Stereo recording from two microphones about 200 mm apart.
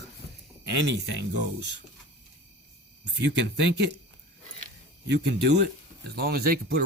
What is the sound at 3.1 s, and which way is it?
Speech, 60° right (ahead or behind).